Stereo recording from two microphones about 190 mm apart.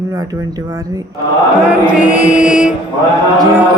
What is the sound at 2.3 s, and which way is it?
Mantra, 5° right (ahead or behind).